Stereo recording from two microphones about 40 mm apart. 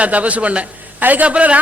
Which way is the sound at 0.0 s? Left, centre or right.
Right.